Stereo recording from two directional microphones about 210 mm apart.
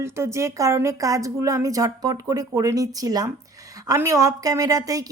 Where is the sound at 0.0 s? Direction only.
15° right (ahead or behind).